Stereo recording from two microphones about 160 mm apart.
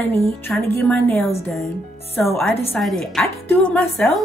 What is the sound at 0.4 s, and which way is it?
Speech, 15° left (ahead or behind).